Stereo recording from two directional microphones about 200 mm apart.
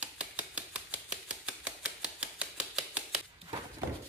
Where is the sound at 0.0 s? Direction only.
5° right (ahead or behind).